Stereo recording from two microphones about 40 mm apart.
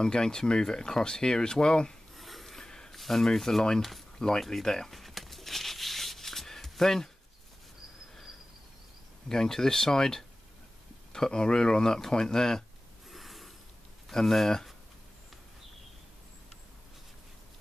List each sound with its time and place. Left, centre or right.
0.0 s speech: centre
2.1 s a sound: centre
2.9 s speech: centre
4.2 s a sound: centre
9.3 s speech: centre
13.1 s snort: centre
14.1 s speech: centre